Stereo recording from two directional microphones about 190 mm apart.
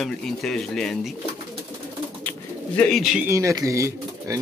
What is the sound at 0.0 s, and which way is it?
Speech, centre (ahead or behind).